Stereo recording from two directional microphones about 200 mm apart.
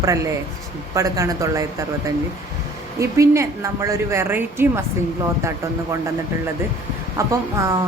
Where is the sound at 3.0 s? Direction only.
15° right (ahead or behind).